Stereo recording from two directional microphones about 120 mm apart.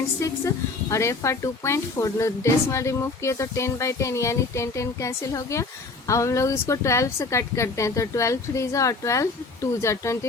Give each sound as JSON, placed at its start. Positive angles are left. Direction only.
{"t": 0.2, "sound": "a woman's voice", "side_deg": 25}